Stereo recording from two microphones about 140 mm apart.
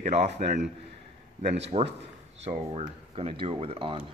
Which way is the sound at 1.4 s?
55° right (ahead or behind).